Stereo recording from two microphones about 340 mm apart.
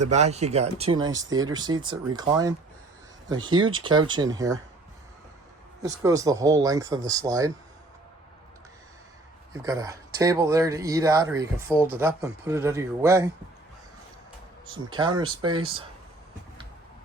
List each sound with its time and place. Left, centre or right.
0.0 s speech: centre
3.8 s speech: centre
6.0 s speech: centre
9.5 s speech: centre
14.9 s speech: centre